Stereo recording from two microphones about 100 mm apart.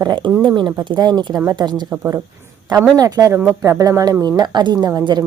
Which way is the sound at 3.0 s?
35° right (ahead or behind).